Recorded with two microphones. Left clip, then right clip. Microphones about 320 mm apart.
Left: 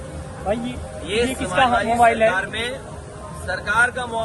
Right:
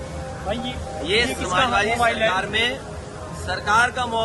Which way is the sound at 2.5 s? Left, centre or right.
Centre.